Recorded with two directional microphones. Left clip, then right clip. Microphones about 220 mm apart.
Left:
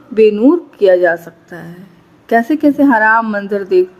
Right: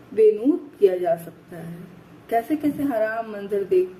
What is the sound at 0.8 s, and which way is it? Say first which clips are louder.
Speech: left 10 dB; 50° left (ahead or behind).